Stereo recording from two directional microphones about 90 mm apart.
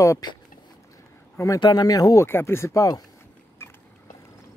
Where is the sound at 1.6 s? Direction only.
50° left (ahead or behind).